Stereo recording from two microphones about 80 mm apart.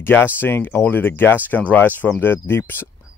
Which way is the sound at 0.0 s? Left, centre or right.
Left.